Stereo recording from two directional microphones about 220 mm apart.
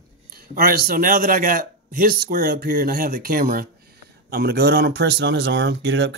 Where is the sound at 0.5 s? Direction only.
45° right (ahead or behind).